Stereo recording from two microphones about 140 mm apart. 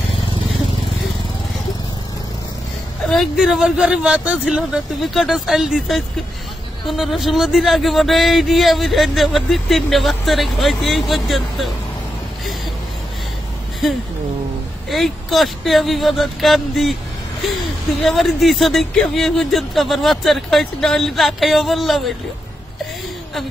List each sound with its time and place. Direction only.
3.1 s speech: centre (ahead or behind)
14.9 s speech: centre (ahead or behind)
18.0 s speech: centre (ahead or behind)